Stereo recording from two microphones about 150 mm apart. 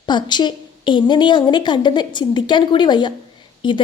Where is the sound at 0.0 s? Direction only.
30° left (ahead or behind).